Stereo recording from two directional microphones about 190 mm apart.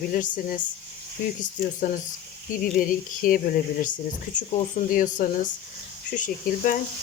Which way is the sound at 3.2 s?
50° left (ahead or behind).